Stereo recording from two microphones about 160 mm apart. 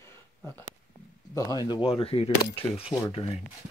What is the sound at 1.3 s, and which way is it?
Speech, 20° left (ahead or behind).